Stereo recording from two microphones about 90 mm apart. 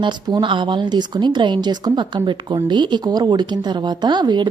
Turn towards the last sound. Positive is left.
turn(degrees=-55)  # may be behind; listen again after turning